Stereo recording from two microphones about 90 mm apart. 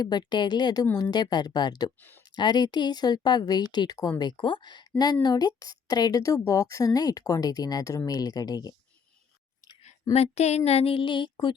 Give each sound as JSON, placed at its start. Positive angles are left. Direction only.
{"t": 0.0, "sound": "a woman's voice", "side_deg": 55}
{"t": 2.0, "sound": "speech", "side_deg": 20}
{"t": 2.3, "sound": "a woman's voice", "side_deg": 55}
{"t": 4.2, "sound": "a woman's voice", "side_deg": 60}
{"t": 10.8, "sound": "speech", "side_deg": 90}